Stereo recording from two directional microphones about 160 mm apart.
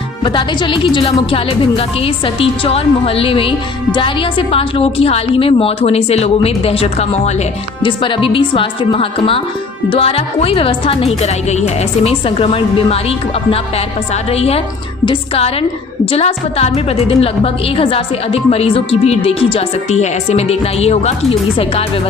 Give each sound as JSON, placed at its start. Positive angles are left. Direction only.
{"t": 0.2, "sound": "a woman's voice", "side_deg": 30}
{"t": 14.3, "sound": "a woman's voice", "side_deg": 40}